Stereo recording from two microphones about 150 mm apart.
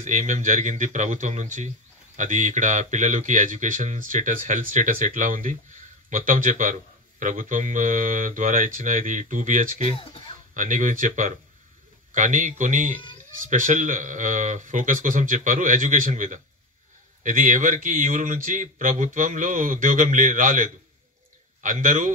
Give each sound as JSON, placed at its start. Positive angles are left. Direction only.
{"t": 0.0, "sound": "speech", "side_deg": -55}
{"t": 9.8, "sound": "speech", "side_deg": 40}
{"t": 10.5, "sound": "speech", "side_deg": -60}